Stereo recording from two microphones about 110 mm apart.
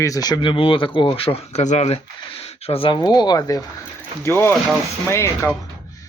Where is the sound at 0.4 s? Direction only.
50° left (ahead or behind); by 2.0 s 90° left.